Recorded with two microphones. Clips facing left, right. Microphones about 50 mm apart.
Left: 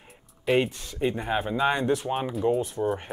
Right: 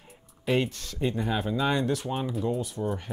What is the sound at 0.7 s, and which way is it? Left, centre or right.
Speech, centre.